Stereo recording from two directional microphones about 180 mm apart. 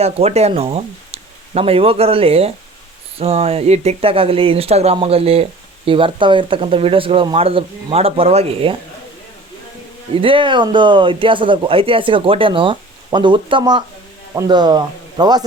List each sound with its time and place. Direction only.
0.0 s speech: 35° right (ahead or behind)
10.2 s speech: 30° right (ahead or behind)